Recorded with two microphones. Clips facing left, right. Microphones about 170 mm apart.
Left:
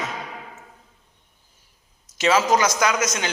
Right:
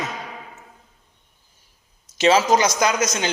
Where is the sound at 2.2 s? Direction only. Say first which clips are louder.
Right 2 dB; 25° right (ahead or behind).